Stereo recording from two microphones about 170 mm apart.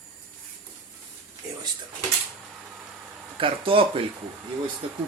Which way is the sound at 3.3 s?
30° right (ahead or behind).